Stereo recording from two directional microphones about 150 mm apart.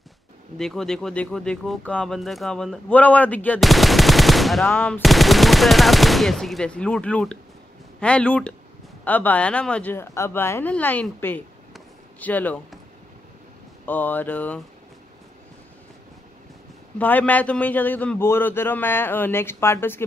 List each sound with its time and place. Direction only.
0.6 s speech: 5° left (ahead or behind)
3.6 s machine gun: centre (ahead or behind)
4.6 s a man's voice: 10° left (ahead or behind)
5.0 s a man's voice: centre (ahead or behind)
13.8 s a man's voice: 10° left (ahead or behind)
17.0 s a man's voice: 10° left (ahead or behind)